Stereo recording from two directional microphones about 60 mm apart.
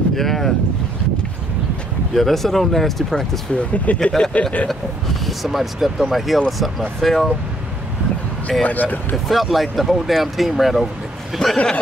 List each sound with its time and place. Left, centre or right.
0.1 s speech: centre
2.1 s speech: centre
3.5 s speech: left
5.2 s speech: centre
8.6 s speech: left
9.1 s speech: centre
11.5 s speech: centre